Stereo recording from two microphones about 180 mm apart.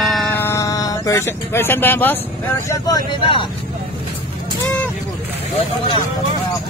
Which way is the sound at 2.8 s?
25° left (ahead or behind).